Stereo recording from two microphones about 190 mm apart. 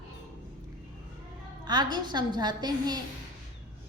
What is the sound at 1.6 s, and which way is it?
Music, 20° right (ahead or behind).